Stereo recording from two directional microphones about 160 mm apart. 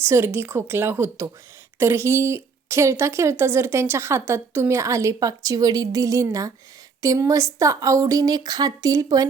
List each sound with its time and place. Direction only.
0.0 s a woman's voice: 15° right (ahead or behind)